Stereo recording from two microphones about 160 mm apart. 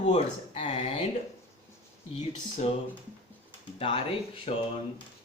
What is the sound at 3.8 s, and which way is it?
Speech, 35° left (ahead or behind).